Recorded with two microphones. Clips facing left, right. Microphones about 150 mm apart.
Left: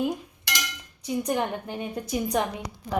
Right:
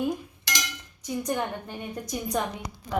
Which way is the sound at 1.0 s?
15° left (ahead or behind).